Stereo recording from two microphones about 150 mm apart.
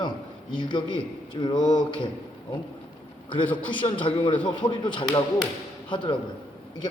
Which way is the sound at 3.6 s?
30° left (ahead or behind).